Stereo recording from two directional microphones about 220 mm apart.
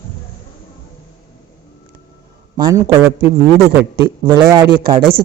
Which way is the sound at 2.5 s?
15° right (ahead or behind).